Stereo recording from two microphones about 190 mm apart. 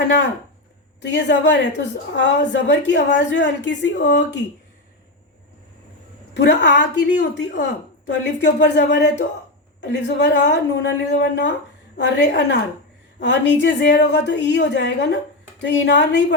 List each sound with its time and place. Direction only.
1.0 s a woman's voice: 65° left (ahead or behind)
6.3 s a woman's voice: 65° left (ahead or behind)